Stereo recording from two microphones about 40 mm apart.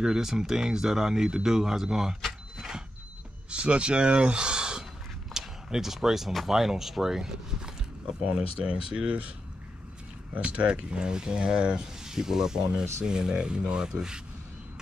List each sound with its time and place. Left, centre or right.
0.0 s speech: centre
2.2 s vehicle: centre
3.4 s speech: right; by 7.7 s centre
8.6 s speech: right
10.3 s speech: right; by 14.2 s centre